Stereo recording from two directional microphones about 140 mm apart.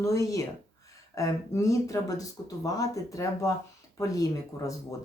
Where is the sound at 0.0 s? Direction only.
25° left (ahead or behind).